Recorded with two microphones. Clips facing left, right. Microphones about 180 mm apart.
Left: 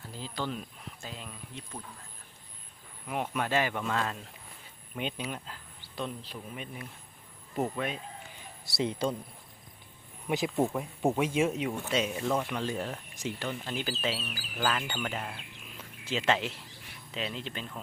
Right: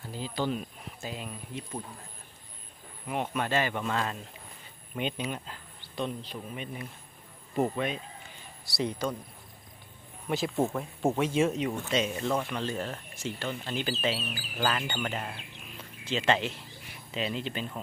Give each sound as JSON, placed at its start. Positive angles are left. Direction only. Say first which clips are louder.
{"t": 0.1, "sound": "speech", "louder": "right 5 dB", "side_deg": -5}
{"t": 3.1, "sound": "speech", "louder": "right 1 dB", "side_deg": 5}
{"t": 8.6, "sound": "speech", "louder": "left 1 dB", "side_deg": 20}
{"t": 10.2, "sound": "speech", "louder": "even", "side_deg": 15}
{"t": 15.8, "sound": "a sound", "louder": "right 1 dB", "side_deg": 5}
{"t": 17.1, "sound": "speech", "louder": "right 4 dB", "side_deg": 0}